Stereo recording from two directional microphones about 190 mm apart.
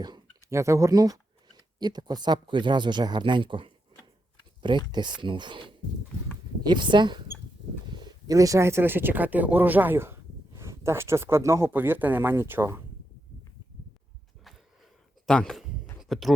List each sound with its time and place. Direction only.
0.0 s speech: 20° right (ahead or behind)
4.9 s speech: 25° right (ahead or behind)
15.3 s speech: 5° left (ahead or behind)
16.0 s a sound: centre (ahead or behind)